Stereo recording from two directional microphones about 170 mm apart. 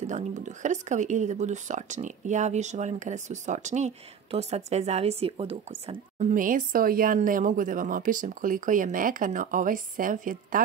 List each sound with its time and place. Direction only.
0.0 s speech: 45° right (ahead or behind)